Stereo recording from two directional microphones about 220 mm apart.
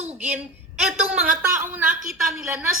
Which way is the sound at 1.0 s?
5° right (ahead or behind).